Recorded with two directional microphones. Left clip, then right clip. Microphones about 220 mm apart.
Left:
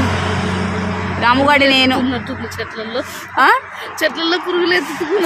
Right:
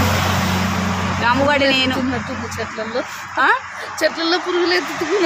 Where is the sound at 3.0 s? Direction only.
45° left (ahead or behind).